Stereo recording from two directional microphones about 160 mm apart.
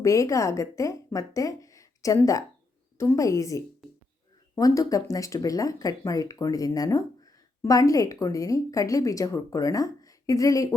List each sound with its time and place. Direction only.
0.0 s a woman's voice: 20° left (ahead or behind)